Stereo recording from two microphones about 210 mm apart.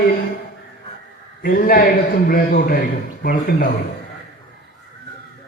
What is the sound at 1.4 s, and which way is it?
A man's voice, 45° left (ahead or behind).